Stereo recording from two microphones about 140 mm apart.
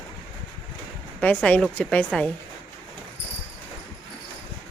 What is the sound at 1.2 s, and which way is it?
Speech, 10° left (ahead or behind).